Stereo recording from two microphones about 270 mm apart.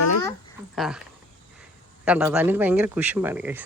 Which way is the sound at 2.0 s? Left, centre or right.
Centre.